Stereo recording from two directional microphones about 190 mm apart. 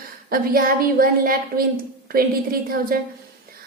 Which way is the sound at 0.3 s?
50° right (ahead or behind).